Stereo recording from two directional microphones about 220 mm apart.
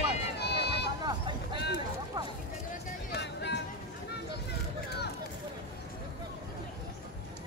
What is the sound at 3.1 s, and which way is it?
Music, 50° left (ahead or behind).